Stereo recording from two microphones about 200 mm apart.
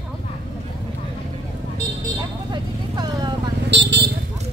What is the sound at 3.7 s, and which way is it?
Vehicle, 60° right (ahead or behind).